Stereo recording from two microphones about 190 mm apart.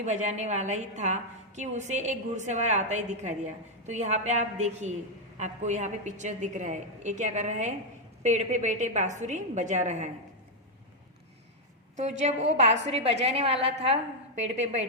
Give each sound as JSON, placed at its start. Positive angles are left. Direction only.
{"t": 0.0, "sound": "a woman's voice", "side_deg": -40}
{"t": 12.2, "sound": "a woman's voice", "side_deg": -35}